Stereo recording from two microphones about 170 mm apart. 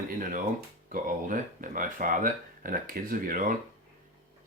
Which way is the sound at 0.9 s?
55° right (ahead or behind).